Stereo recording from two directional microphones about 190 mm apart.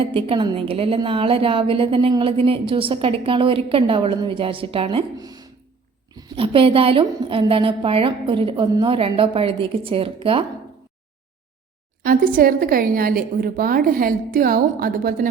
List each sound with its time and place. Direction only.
0.0 s a woman's voice: 30° right (ahead or behind)
12.0 s a woman's voice: 50° right (ahead or behind)